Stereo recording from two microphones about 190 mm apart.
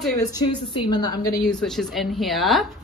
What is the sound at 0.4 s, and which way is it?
A woman's voice, 20° left (ahead or behind).